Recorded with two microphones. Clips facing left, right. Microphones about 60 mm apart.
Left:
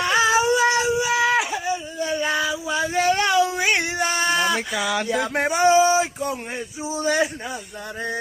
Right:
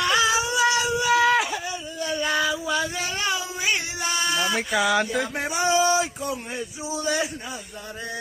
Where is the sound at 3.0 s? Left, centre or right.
Left.